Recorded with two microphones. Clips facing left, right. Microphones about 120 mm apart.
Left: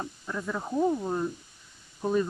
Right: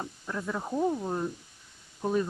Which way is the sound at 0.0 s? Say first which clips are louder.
Left 1 dB; centre (ahead or behind).